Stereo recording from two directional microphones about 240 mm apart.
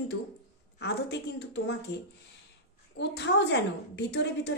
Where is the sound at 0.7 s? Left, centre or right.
Left.